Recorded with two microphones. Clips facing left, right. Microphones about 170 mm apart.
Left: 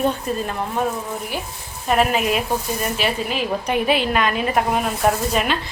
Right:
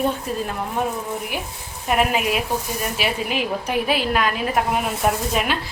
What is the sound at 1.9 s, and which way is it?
A woman's voice, 10° right (ahead or behind).